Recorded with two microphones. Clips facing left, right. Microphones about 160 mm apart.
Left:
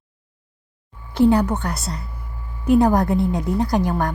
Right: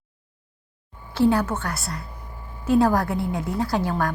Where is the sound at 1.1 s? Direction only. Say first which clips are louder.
Left 4 dB; 20° left (ahead or behind).